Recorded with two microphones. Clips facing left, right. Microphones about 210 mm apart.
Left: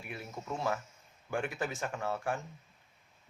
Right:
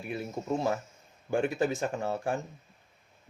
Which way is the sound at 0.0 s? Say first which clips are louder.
Right 8 dB; 35° right (ahead or behind).